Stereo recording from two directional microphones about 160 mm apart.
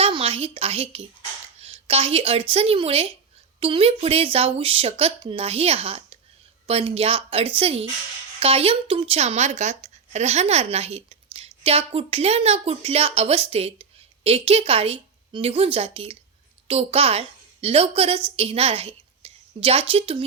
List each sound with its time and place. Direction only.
0.0 s a woman's voice: 35° right (ahead or behind)